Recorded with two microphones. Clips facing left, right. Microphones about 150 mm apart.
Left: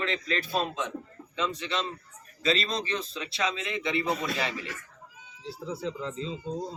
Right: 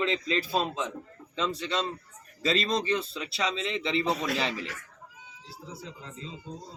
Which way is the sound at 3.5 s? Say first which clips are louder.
Right 1 dB; 30° right (ahead or behind).